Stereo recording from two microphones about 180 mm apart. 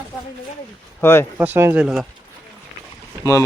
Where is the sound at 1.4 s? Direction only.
10° right (ahead or behind).